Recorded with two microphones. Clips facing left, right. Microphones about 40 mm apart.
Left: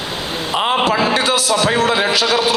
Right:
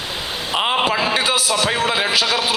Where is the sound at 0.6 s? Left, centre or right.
Centre.